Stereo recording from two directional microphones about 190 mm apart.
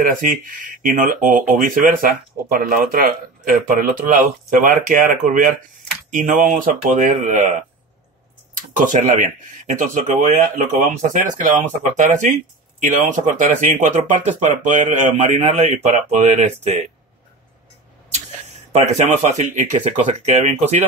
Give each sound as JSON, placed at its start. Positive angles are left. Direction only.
{"t": 0.0, "sound": "speech", "side_deg": -45}
{"t": 18.7, "sound": "speech", "side_deg": -35}